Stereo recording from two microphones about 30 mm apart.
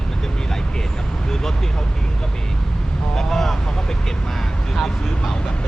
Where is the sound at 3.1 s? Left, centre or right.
Centre.